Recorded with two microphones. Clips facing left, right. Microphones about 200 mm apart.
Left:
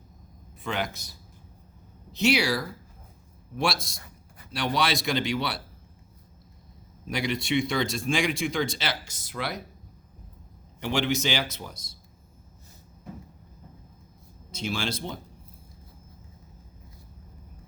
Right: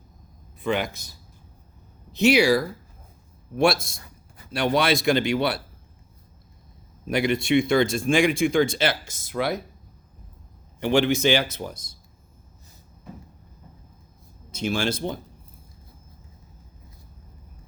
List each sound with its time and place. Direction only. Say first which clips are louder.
0.6 s a man's voice: right 6 dB; 55° right (ahead or behind)
2.1 s speech: right 6 dB; 50° right (ahead or behind)
7.1 s speech: right 6 dB; 55° right (ahead or behind)
10.8 s speech: right 6 dB; 55° right (ahead or behind)
14.5 s speech: right 6 dB; 50° right (ahead or behind)